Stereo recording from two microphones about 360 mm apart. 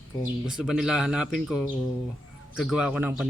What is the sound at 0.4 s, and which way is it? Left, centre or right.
Speech, centre.